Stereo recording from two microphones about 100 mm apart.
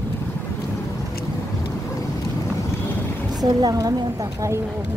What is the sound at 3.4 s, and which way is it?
Speech, 40° right (ahead or behind).